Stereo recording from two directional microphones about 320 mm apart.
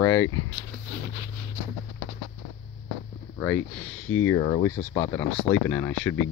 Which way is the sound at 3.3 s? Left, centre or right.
Centre.